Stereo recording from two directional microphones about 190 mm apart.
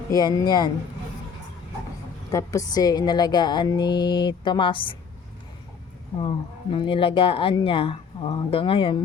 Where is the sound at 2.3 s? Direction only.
15° left (ahead or behind).